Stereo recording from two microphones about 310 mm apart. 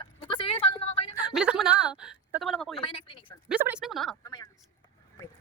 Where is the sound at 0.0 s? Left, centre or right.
Centre.